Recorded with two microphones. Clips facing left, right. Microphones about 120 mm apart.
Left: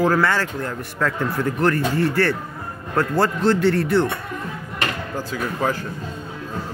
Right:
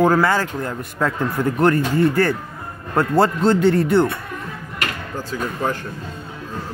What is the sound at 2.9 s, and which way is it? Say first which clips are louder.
Speech: right 3 dB; 25° right (ahead or behind).